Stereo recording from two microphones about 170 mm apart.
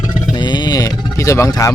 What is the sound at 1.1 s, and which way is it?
Speech, 15° left (ahead or behind).